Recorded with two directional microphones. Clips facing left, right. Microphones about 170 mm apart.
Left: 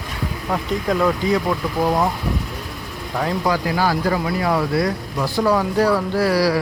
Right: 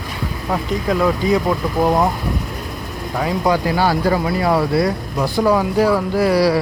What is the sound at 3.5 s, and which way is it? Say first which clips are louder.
Speech: right 4 dB; 25° right (ahead or behind).